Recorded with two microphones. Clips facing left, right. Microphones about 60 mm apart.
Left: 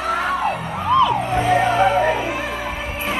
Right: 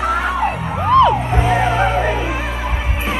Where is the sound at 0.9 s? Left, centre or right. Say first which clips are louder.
Right 4 dB; right.